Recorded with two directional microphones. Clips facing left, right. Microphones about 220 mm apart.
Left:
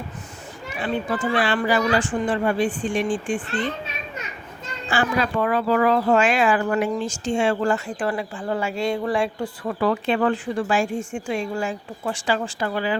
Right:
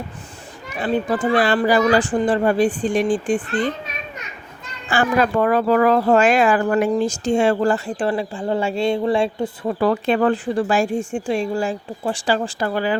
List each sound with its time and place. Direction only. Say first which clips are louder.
0.8 s speech: right 5 dB; 35° right (ahead or behind)
4.9 s speech: right 4 dB; 50° right (ahead or behind); by 9.9 s 25° right (ahead or behind)
9.9 s speech: right 3 dB; 40° right (ahead or behind)